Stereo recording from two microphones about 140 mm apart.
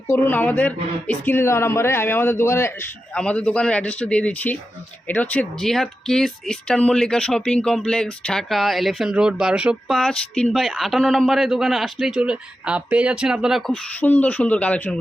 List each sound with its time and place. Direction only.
0.1 s speech: 10° left (ahead or behind)
13.7 s speech: 10° left (ahead or behind)